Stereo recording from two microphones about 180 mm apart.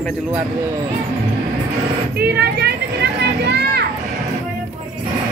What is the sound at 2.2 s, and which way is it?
Speech, 65° right (ahead or behind).